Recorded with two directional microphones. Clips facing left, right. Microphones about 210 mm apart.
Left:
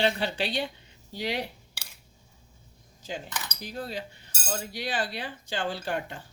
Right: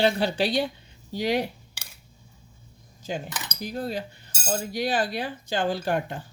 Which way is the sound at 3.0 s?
50° right (ahead or behind).